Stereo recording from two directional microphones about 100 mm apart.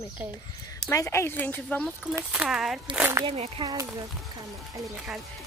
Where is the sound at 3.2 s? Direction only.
85° right.